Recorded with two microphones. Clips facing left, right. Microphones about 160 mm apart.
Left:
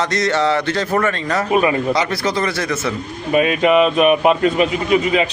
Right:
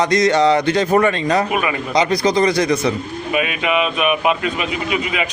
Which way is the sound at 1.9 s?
15° right (ahead or behind).